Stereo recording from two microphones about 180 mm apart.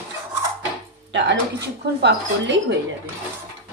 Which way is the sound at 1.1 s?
80° right.